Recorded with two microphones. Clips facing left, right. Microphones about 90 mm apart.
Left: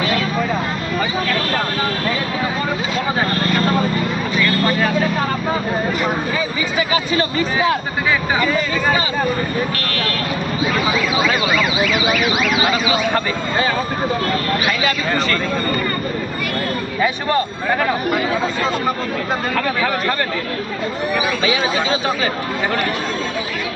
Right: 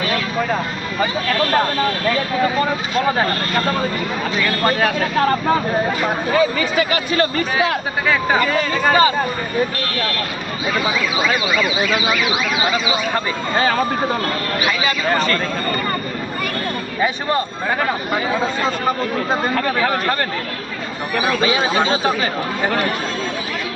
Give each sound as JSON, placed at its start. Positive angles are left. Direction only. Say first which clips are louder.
{"t": 6.3, "sound": "speech", "louder": "right 4 dB", "side_deg": -55}
{"t": 8.9, "sound": "speech", "louder": "right 8 dB", "side_deg": -40}
{"t": 15.1, "sound": "speech", "louder": "right 1 dB", "side_deg": -45}
{"t": 19.8, "sound": "speech", "louder": "right 1 dB", "side_deg": -25}
{"t": 21.6, "sound": "speech", "louder": "right 2 dB", "side_deg": -35}